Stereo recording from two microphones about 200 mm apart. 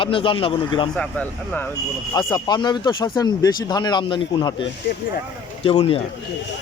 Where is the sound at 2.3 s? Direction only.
20° left (ahead or behind).